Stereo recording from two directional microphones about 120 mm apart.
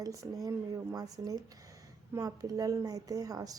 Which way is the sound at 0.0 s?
30° right (ahead or behind).